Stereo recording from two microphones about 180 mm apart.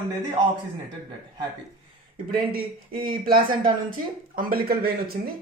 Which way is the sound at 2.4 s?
55° right (ahead or behind).